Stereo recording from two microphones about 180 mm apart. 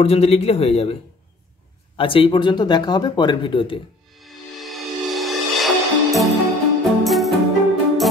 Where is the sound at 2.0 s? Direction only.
30° left (ahead or behind).